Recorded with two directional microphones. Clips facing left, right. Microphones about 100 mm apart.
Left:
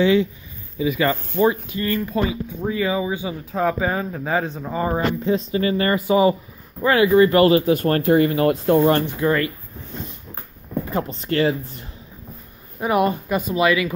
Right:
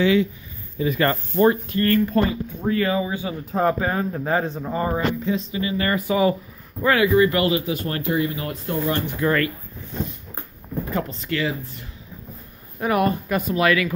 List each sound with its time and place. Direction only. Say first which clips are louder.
0.0 s speech: left 2 dB; 25° left (ahead or behind)
0.7 s a man's voice: left 1 dB; 10° left (ahead or behind)
4.9 s speech: left 2 dB; 40° left (ahead or behind)
5.9 s speech: left 2 dB; 20° left (ahead or behind); by 9.0 s 60° left (ahead or behind)
9.2 s speech: left 1 dB; 15° left (ahead or behind)
11.1 s speech: left 5 dB; 40° left (ahead or behind)
12.8 s speech: left 1 dB; 15° left (ahead or behind)